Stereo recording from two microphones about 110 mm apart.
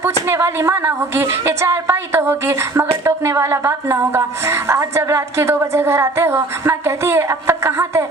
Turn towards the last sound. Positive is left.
turn(degrees=-25)  # may be behind; listen again after turning